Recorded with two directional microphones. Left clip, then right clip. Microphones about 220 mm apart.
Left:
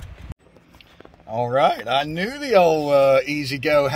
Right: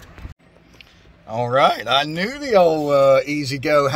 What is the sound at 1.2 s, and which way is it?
Speech, 10° left (ahead or behind).